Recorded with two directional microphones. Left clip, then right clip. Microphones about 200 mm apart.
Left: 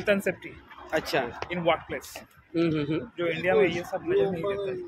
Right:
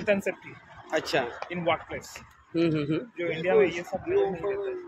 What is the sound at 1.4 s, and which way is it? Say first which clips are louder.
Speech: left 2 dB; 20° left (ahead or behind).